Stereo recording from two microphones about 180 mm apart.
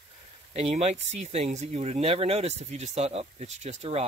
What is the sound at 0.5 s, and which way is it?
Speech, 35° right (ahead or behind).